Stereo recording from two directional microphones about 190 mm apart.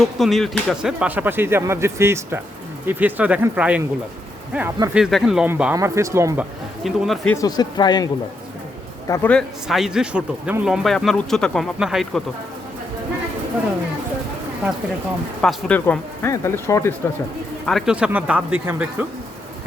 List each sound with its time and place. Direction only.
0.0 s a man's voice: centre (ahead or behind)
6.8 s a man's voice: centre (ahead or behind)
7.3 s a man's voice: 20° left (ahead or behind)
9.3 s a man's voice: centre (ahead or behind)
15.4 s speech: 5° left (ahead or behind)
17.7 s speech: centre (ahead or behind)